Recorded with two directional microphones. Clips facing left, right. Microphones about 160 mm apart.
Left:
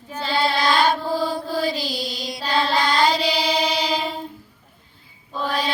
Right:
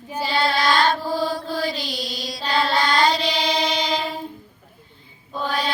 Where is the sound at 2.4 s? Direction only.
10° left (ahead or behind).